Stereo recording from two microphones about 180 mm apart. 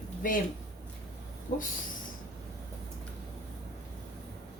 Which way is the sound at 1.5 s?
40° left (ahead or behind).